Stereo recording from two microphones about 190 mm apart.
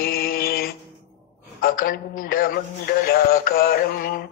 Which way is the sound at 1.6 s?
50° left (ahead or behind).